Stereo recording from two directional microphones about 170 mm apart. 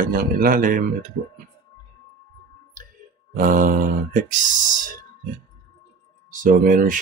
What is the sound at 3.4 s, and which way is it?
Speech, 55° right (ahead or behind).